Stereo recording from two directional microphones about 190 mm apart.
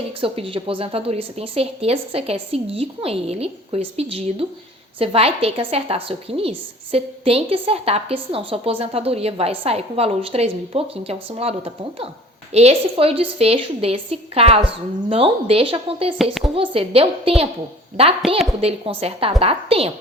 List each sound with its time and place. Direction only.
0.2 s a woman's voice: 30° right (ahead or behind)
16.1 s speech: centre (ahead or behind)
16.6 s a woman's voice: 30° right (ahead or behind)